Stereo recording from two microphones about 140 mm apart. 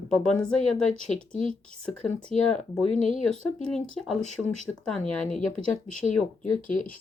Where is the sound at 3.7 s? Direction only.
5° left (ahead or behind).